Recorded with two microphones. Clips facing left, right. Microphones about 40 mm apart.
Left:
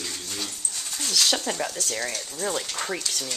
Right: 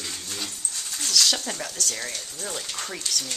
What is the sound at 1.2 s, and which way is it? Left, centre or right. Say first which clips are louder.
Speech: left 1 dB; centre.